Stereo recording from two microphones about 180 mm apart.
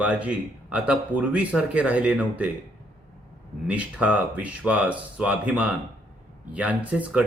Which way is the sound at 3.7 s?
5° right (ahead or behind).